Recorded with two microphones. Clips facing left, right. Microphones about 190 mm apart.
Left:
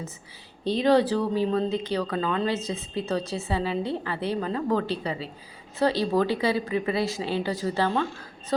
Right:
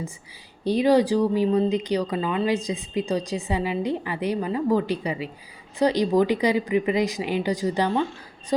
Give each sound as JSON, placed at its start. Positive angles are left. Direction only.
{"t": 0.6, "sound": "speech", "side_deg": -10}